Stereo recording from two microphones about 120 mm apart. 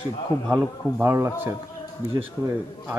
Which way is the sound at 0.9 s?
20° right (ahead or behind).